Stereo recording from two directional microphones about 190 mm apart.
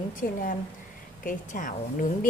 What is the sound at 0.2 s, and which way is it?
A woman's voice, 45° left (ahead or behind).